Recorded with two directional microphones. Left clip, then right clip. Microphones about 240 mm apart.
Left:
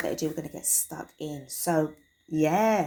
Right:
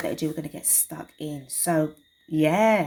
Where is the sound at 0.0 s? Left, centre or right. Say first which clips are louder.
Right 1 dB; right.